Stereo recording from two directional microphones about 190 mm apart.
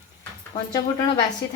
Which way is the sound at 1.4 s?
65° left (ahead or behind).